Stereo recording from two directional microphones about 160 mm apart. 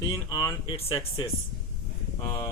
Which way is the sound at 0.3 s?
25° left (ahead or behind).